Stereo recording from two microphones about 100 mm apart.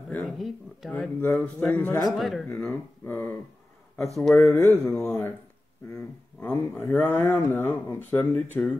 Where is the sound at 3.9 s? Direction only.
5° left (ahead or behind).